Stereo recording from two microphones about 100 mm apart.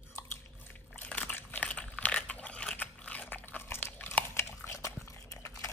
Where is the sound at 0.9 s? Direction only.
15° left (ahead or behind).